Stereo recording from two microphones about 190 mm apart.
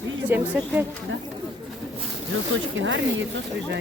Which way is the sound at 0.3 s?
10° right (ahead or behind).